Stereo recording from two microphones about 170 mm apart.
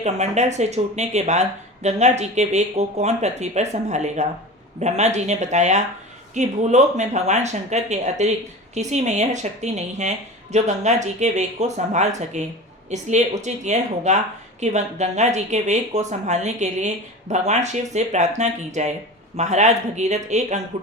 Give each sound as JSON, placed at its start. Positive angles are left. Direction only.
{"t": 0.0, "sound": "a woman's voice", "side_deg": -40}